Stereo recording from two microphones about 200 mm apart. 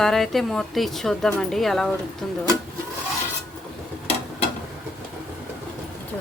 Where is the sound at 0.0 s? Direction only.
Centre (ahead or behind).